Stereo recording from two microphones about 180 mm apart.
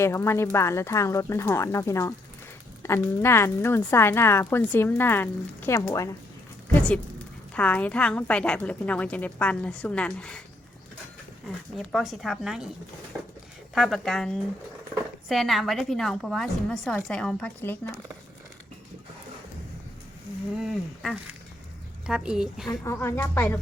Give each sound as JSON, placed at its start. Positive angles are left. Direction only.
{"t": 0.0, "sound": "a woman's voice", "side_deg": 15}
{"t": 11.8, "sound": "a woman's voice", "side_deg": 0}
{"t": 13.7, "sound": "a woman's voice", "side_deg": 0}
{"t": 20.6, "sound": "a woman's voice", "side_deg": 0}
{"t": 22.7, "sound": "a woman's voice", "side_deg": 15}